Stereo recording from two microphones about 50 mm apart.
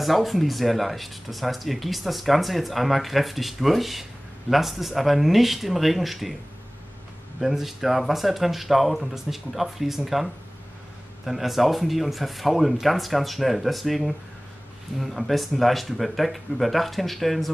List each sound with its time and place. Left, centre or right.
0.0 s speech: centre
7.3 s speech: centre